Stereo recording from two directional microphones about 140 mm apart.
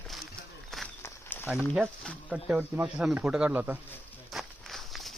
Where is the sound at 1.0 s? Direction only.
15° left (ahead or behind).